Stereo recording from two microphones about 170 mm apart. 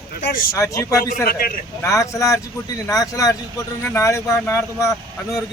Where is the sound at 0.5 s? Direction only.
20° left (ahead or behind).